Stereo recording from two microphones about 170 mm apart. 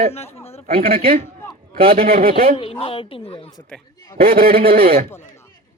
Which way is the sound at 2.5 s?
35° left (ahead or behind).